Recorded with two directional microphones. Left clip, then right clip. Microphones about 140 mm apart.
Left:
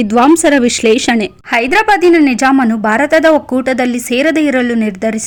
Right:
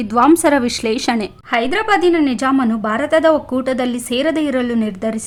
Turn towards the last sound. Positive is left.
turn(degrees=25)  # may be behind; listen again after turning